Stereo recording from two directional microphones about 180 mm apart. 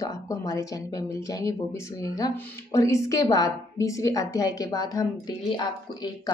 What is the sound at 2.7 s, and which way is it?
A woman's voice, 15° left (ahead or behind).